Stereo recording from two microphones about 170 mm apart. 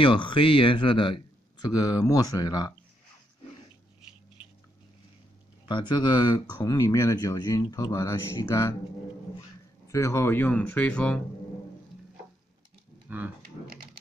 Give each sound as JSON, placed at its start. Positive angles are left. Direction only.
{"t": 0.0, "sound": "speech", "side_deg": 30}
{"t": 5.7, "sound": "speech", "side_deg": 25}
{"t": 9.8, "sound": "speech", "side_deg": 15}
{"t": 13.1, "sound": "speech", "side_deg": -10}